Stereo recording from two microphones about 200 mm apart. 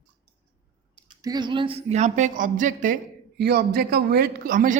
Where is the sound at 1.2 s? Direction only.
20° right (ahead or behind); by 4.8 s 40° right (ahead or behind).